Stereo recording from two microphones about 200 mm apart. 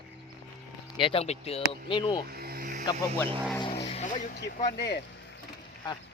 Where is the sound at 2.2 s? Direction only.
50° right (ahead or behind).